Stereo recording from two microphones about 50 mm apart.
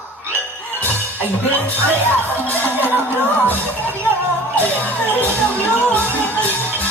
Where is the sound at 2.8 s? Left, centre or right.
Right.